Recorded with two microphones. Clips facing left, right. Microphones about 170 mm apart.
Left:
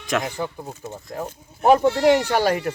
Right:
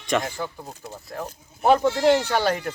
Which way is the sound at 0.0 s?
Centre (ahead or behind).